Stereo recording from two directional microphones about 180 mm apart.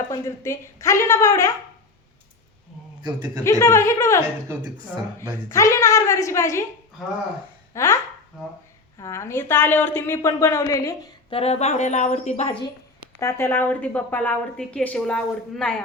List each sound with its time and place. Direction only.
0.1 s a woman's voice: 15° left (ahead or behind)
3.0 s a man's voice: 20° right (ahead or behind)
3.6 s a woman's voice: 15° left (ahead or behind)
5.5 s a woman's voice: 15° left (ahead or behind)
7.7 s speech: 15° left (ahead or behind)
8.3 s speech: 5° right (ahead or behind)
9.0 s a woman's voice: 15° left (ahead or behind)
11.3 s a woman's voice: 35° left (ahead or behind)
13.1 s a woman's voice: 15° left (ahead or behind)